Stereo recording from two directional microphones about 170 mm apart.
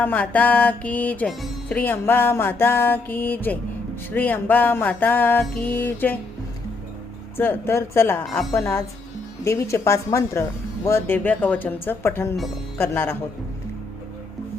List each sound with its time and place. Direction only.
0.0 s music: 10° left (ahead or behind)
7.3 s music: 10° left (ahead or behind)
8.2 s a woman's voice: centre (ahead or behind)
8.5 s music: 15° left (ahead or behind)